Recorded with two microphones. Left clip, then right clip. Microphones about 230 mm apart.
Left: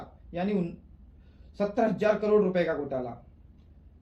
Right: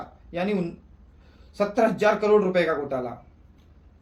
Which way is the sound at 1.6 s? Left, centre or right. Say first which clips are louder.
Right 5 dB; centre.